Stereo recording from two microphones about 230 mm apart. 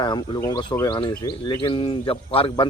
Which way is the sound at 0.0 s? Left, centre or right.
Centre.